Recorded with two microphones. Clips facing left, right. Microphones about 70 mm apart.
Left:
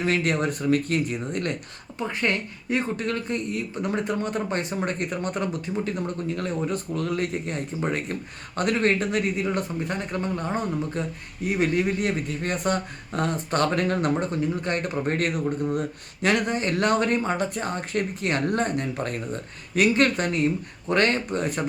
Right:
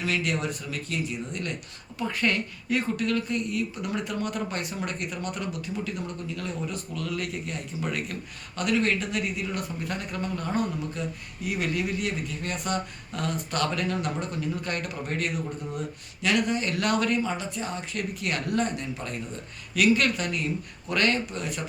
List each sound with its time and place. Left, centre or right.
0.0 s speech: left
2.0 s speech: left
16.2 s speech: left
18.2 s speech: left
19.7 s speech: left